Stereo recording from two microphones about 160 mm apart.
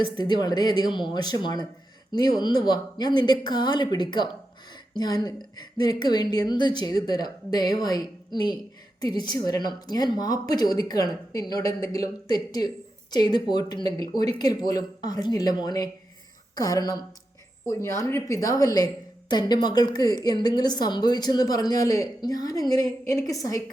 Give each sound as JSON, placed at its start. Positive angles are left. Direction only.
{"t": 0.2, "sound": "a woman's voice", "side_deg": 25}